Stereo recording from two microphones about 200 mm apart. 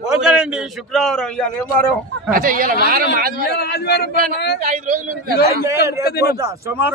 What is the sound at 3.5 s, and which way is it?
Speech, 55° left (ahead or behind).